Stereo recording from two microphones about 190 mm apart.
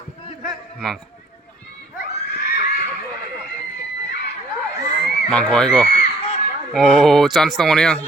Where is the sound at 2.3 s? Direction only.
55° left (ahead or behind).